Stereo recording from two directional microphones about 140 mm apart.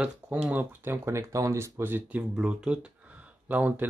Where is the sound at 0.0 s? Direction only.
10° right (ahead or behind).